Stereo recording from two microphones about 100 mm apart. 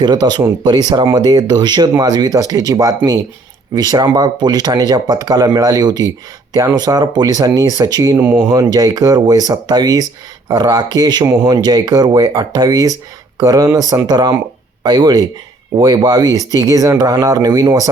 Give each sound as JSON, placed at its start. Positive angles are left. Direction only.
{"t": 0.0, "sound": "speech", "side_deg": -45}